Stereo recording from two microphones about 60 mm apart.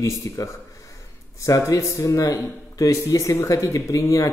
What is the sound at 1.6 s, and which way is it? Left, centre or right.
Speech, left.